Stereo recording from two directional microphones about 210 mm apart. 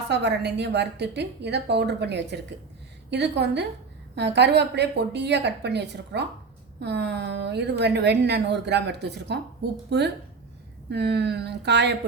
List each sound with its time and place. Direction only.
0.1 s a woman's voice: 55° right (ahead or behind)